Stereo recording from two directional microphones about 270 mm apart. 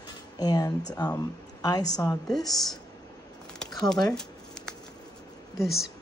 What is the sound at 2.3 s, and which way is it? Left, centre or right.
Speech, centre.